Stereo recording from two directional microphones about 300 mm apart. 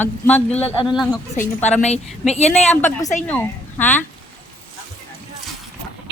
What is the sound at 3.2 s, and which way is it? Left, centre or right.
Speech, centre.